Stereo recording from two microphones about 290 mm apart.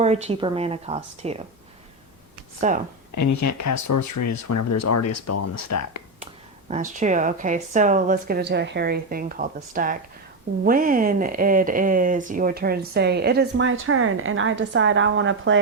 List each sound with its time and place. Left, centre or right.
0.0 s speech: right
2.6 s speech: right
3.2 s speech: left
6.7 s speech: right